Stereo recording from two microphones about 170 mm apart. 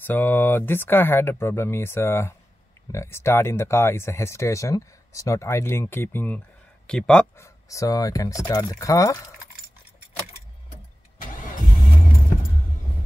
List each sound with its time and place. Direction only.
0.0 s speech: 10° left (ahead or behind)
7.3 s speech: 15° left (ahead or behind)